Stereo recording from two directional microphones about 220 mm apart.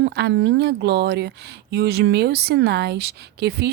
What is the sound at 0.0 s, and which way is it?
Speech, 50° right (ahead or behind).